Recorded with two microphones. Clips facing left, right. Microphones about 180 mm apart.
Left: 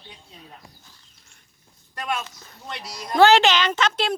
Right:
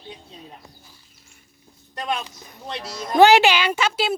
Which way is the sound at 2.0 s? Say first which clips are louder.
Right 2 dB; 15° right (ahead or behind).